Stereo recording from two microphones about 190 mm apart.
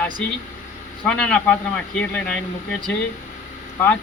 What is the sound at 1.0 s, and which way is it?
A man's voice, 5° left (ahead or behind).